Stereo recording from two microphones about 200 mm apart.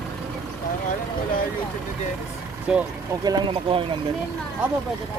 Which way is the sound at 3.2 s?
20° right (ahead or behind).